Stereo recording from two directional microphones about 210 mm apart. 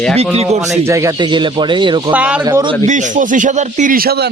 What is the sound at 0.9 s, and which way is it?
Speech, 15° right (ahead or behind).